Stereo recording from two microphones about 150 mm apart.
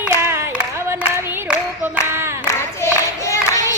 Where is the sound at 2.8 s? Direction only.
20° left (ahead or behind).